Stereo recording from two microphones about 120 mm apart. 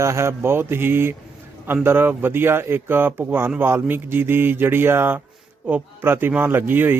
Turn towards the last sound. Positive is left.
turn(degrees=-15)  # may be behind; listen again after turning